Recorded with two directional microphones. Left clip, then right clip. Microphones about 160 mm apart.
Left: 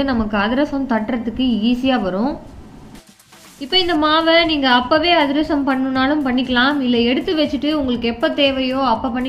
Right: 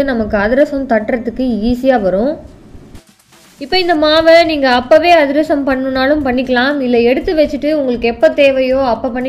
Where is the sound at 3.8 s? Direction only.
30° right (ahead or behind).